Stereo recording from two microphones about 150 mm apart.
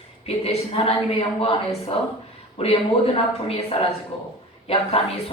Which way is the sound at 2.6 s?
40° left (ahead or behind).